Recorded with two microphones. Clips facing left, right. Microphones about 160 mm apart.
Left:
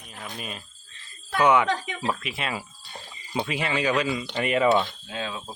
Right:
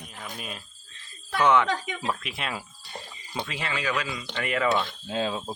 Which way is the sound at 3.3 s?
15° left (ahead or behind).